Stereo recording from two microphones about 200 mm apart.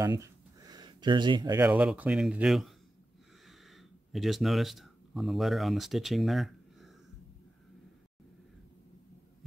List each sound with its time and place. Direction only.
0.0 s a sound: 20° right (ahead or behind)
1.6 s speech: 5° right (ahead or behind)
3.7 s speech: centre (ahead or behind)